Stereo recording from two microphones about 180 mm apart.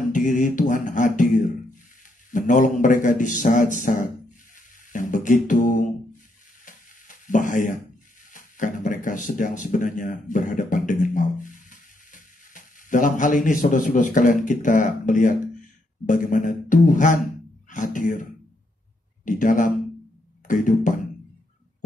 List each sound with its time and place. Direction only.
0.1 s mantra: 45° left (ahead or behind)
2.3 s a man's voice: 45° left (ahead or behind)
4.6 s beatboxing: 45° left (ahead or behind)
6.6 s stir: 45° left (ahead or behind)
8.3 s a man's voice: 45° left (ahead or behind)
19.2 s a man's voice: 45° left (ahead or behind)